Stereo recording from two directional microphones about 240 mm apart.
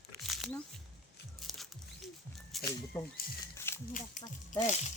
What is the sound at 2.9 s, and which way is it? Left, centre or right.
Speech, centre.